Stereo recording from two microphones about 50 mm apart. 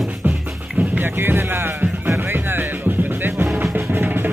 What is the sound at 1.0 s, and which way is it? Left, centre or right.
Music, right.